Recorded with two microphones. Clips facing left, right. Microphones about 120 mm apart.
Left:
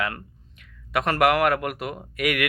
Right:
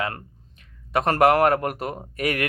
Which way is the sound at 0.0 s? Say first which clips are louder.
Even; 35° right (ahead or behind).